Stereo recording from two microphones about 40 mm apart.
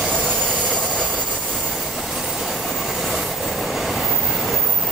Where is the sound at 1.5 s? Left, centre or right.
Centre.